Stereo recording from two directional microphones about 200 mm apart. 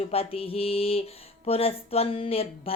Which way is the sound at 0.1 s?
30° left (ahead or behind).